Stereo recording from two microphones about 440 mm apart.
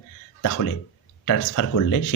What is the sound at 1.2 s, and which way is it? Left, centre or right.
Speech, left.